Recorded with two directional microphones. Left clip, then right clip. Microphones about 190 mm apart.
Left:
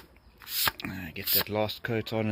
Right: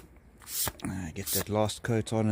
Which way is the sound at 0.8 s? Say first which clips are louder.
Left 1 dB; 10° right (ahead or behind).